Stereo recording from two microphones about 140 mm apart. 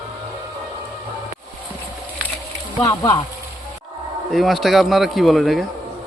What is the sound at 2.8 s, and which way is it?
Speech, 30° left (ahead or behind).